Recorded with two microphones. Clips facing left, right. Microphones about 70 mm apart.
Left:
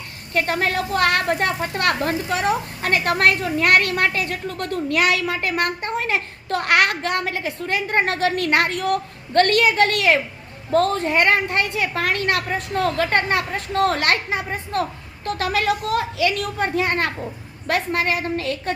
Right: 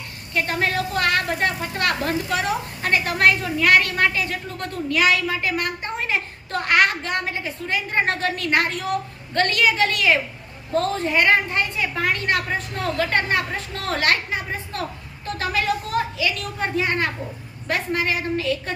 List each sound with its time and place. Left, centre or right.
0.3 s a woman's voice: left
2.9 s a woman's voice: left
11.6 s a woman's voice: left
12.7 s a woman's voice: left
15.4 s a woman's voice: left